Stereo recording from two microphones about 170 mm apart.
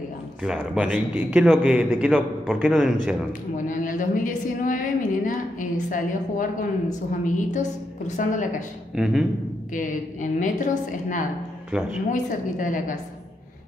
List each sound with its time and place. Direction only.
0.4 s a man's voice: 5° right (ahead or behind)
3.5 s a sound: 50° left (ahead or behind)
7.1 s a woman's voice: 50° left (ahead or behind)
8.9 s a man's voice: 5° right (ahead or behind)
10.2 s a woman's voice: 50° left (ahead or behind)
11.7 s a man's voice: 5° right (ahead or behind)
12.1 s a woman's voice: 50° left (ahead or behind)